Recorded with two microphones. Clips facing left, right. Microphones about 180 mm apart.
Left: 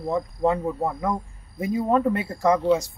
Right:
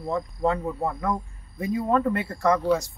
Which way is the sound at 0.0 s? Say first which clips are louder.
Left 2 dB; 10° left (ahead or behind).